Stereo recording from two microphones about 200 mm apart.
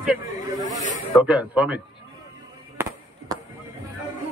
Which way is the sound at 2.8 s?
10° right (ahead or behind).